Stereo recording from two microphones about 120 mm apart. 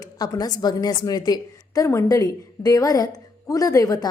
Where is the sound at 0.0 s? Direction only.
35° left (ahead or behind).